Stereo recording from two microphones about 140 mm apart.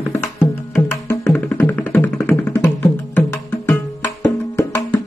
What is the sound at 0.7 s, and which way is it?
Music, 15° left (ahead or behind).